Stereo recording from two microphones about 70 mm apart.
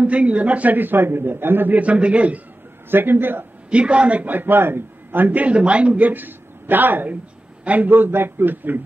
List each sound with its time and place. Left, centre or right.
0.0 s a man's voice: centre
2.9 s a man's voice: right
3.7 s a man's voice: centre